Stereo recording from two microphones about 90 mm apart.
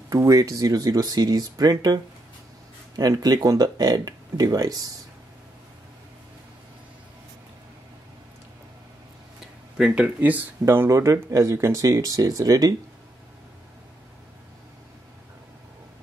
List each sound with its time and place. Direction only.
0.1 s speech: 40° right (ahead or behind)
3.0 s speech: 45° right (ahead or behind)
9.8 s speech: 10° right (ahead or behind)
10.6 s speech: 30° right (ahead or behind)